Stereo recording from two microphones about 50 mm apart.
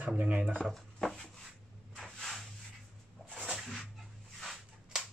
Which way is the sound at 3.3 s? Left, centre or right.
Centre.